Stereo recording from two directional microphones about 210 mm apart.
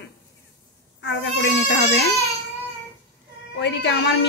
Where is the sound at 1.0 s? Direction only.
55° left (ahead or behind).